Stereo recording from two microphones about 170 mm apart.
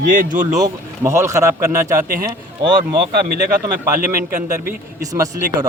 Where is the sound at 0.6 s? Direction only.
15° right (ahead or behind).